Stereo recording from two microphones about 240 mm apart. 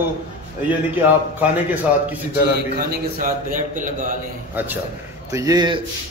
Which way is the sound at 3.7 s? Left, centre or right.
Right.